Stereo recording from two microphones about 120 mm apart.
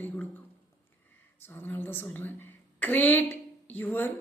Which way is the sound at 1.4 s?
15° left (ahead or behind).